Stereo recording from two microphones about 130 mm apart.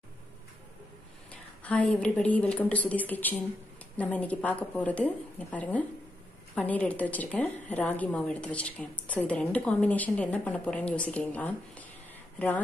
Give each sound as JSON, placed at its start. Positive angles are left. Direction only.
{"t": 1.3, "sound": "a woman's voice", "side_deg": 10}